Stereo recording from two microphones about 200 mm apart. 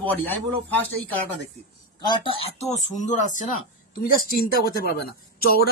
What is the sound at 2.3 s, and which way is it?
Speech, 30° left (ahead or behind).